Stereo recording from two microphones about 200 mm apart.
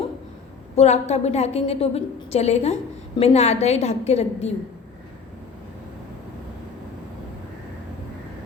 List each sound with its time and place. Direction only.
0.8 s a woman's voice: 35° left (ahead or behind)